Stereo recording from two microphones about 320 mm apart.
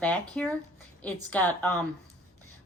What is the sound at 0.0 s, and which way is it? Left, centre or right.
A woman's voice, centre.